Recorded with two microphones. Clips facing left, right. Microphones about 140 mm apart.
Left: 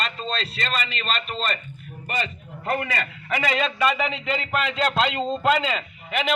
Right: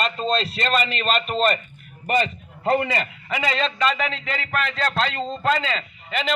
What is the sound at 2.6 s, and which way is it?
Speech, 25° right (ahead or behind).